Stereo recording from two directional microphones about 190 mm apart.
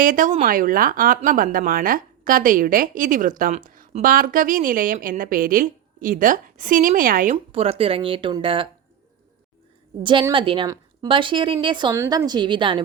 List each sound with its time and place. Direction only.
0.0 s a woman's voice: 45° right (ahead or behind)
7.5 s a woman's voice: 30° right (ahead or behind)
10.0 s a woman's voice: 25° right (ahead or behind)